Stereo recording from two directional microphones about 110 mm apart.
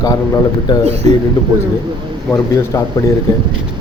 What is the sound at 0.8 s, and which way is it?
Speech, 80° right.